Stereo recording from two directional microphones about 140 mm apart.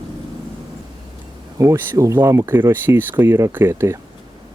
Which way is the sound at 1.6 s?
20° right (ahead or behind).